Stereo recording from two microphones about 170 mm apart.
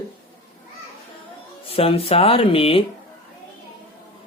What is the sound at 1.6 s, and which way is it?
Speech, 35° left (ahead or behind).